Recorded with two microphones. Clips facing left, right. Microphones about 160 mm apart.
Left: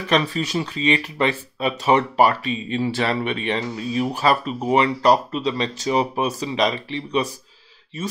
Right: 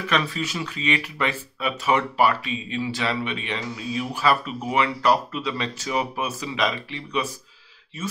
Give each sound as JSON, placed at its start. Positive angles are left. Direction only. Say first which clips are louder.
{"t": 0.1, "sound": "speech", "louder": "left 6 dB", "side_deg": 35}
{"t": 2.9, "sound": "speech", "louder": "left 3 dB", "side_deg": 50}